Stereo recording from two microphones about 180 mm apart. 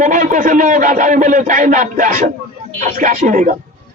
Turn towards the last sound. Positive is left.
turn(degrees=-45)  # may be behind; listen again after turning